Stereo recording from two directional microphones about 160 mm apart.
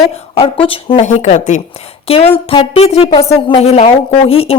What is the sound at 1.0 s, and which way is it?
A woman's voice, 50° left (ahead or behind).